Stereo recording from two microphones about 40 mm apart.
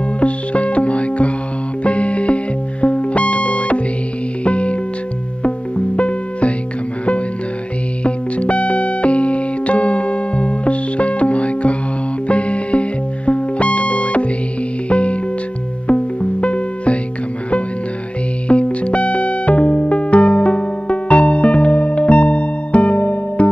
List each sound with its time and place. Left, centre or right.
0.2 s music: left
8.0 s music: left
18.5 s music: left